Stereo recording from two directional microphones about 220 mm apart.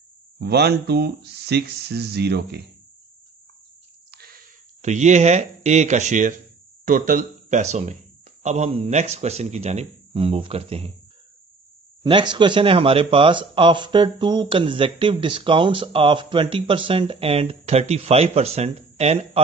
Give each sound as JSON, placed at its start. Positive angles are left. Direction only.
{"t": 0.4, "sound": "speech", "side_deg": -50}
{"t": 4.1, "sound": "a sound", "side_deg": -45}
{"t": 4.8, "sound": "speech", "side_deg": -30}
{"t": 12.0, "sound": "speech", "side_deg": -20}